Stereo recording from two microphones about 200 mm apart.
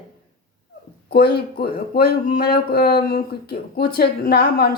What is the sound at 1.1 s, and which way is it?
A woman's voice, 50° left (ahead or behind).